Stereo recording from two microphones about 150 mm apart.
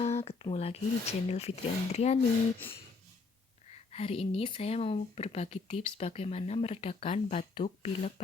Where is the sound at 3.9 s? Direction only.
40° left (ahead or behind).